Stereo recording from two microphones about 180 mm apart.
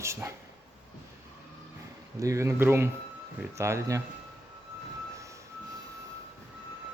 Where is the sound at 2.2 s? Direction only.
15° right (ahead or behind).